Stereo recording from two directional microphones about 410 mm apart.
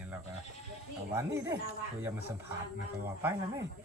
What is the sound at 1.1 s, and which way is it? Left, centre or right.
Speech, centre.